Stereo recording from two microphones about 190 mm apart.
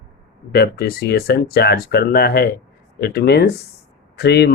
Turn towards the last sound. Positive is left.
turn(degrees=60)  # may be behind; listen again after turning